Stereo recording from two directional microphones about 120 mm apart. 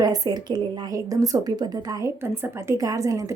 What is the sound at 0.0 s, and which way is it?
A woman's voice, 30° right (ahead or behind).